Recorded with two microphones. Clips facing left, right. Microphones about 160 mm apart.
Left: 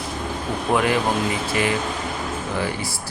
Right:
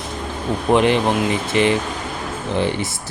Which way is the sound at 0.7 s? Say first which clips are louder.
Right 4 dB; 25° right (ahead or behind).